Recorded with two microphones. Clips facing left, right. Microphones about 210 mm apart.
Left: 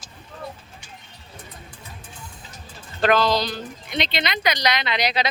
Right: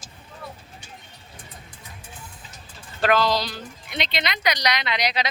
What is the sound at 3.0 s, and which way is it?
Speech, 5° right (ahead or behind).